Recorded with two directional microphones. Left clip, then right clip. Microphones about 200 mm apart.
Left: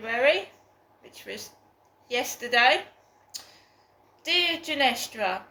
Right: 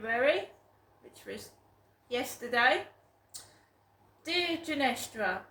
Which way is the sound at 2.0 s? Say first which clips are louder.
Left 6 dB; 15° right (ahead or behind).